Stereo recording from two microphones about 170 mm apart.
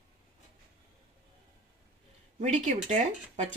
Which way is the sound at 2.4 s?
45° right (ahead or behind).